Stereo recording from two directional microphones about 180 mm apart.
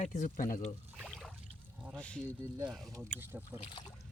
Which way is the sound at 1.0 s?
5° right (ahead or behind).